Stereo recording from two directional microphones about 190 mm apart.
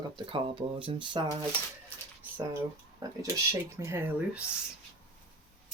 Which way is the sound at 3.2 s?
15° right (ahead or behind).